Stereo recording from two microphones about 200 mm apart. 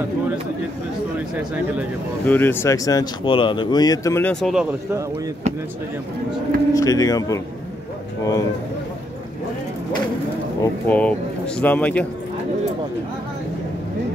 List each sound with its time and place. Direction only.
2.2 s speech: 10° left (ahead or behind)
6.7 s speech: 15° left (ahead or behind)
10.6 s speech: 5° left (ahead or behind)